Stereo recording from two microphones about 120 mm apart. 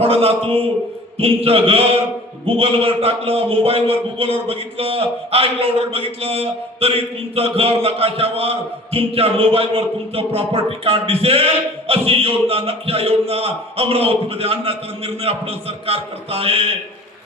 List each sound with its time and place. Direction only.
0.0 s a man's voice: 55° right (ahead or behind)